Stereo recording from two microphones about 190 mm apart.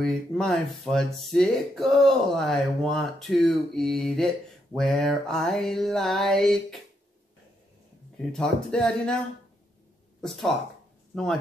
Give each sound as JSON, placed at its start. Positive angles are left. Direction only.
{"t": 0.0, "sound": "speech", "side_deg": 5}
{"t": 8.2, "sound": "speech", "side_deg": 5}
{"t": 11.1, "sound": "speech", "side_deg": 0}